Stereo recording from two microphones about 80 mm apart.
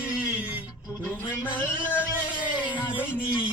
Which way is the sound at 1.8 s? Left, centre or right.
Centre.